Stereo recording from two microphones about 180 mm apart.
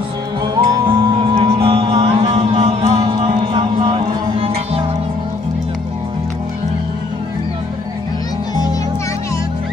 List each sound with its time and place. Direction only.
0.6 s music: 25° right (ahead or behind)